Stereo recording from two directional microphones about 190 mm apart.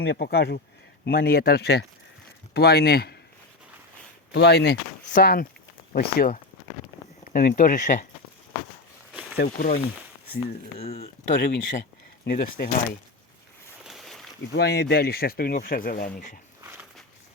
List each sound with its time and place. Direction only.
0.0 s speech: 60° left (ahead or behind)
4.3 s speech: 60° left (ahead or behind); by 8.0 s 45° left (ahead or behind)
9.4 s speech: 50° left (ahead or behind)
10.8 s speech: 30° left (ahead or behind)
11.4 s speech: 65° left (ahead or behind)
13.8 s boat: centre (ahead or behind)
14.5 s speech: 60° left (ahead or behind)